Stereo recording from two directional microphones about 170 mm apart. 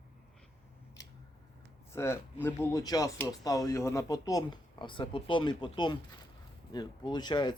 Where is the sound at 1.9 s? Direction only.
15° left (ahead or behind).